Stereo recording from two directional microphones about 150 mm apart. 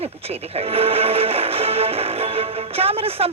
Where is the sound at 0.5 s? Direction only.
40° right (ahead or behind).